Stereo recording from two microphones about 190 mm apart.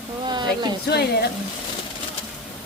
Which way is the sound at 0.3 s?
25° right (ahead or behind).